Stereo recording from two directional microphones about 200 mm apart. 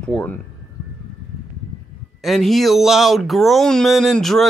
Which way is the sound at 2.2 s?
Centre (ahead or behind).